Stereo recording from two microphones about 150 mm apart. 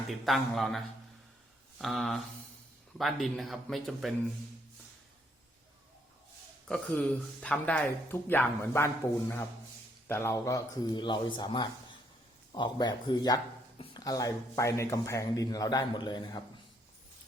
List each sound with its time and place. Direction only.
0.1 s a man's voice: centre (ahead or behind)
1.8 s a man's voice: centre (ahead or behind)
6.7 s a man's voice: 5° left (ahead or behind)
10.1 s a man's voice: 15° left (ahead or behind)
13.7 s a sound: 40° left (ahead or behind)
14.0 s a man's voice: 25° left (ahead or behind)